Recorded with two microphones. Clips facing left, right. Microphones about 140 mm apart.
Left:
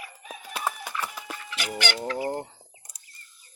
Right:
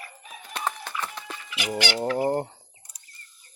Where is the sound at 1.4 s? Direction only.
10° right (ahead or behind).